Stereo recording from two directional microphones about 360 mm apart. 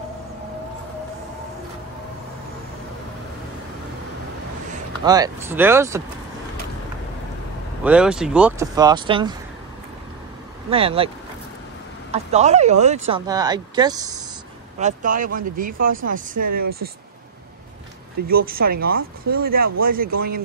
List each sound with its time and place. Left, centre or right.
5.0 s speech: centre
7.8 s speech: centre
10.7 s speech: centre
12.1 s speech: centre
14.8 s speech: right
18.2 s speech: right